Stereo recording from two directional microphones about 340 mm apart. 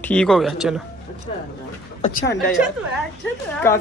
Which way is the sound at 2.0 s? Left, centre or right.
Left.